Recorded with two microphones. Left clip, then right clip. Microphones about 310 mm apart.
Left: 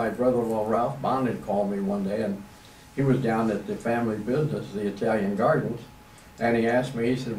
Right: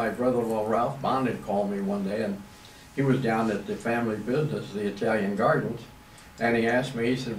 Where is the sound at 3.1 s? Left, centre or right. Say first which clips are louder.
Left 1 dB; centre.